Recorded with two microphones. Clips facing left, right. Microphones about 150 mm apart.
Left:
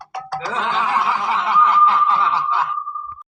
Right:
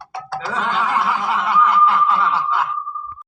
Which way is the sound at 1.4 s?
15° left (ahead or behind).